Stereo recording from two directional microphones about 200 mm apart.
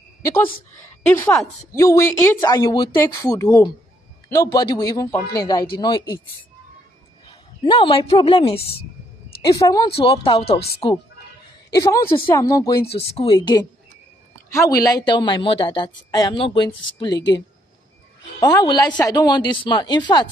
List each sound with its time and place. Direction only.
1.0 s speech: 10° left (ahead or behind)
7.2 s speech: 25° left (ahead or behind)
9.5 s a woman's voice: 15° left (ahead or behind)
12.9 s speech: 30° left (ahead or behind)
18.2 s speech: 20° left (ahead or behind)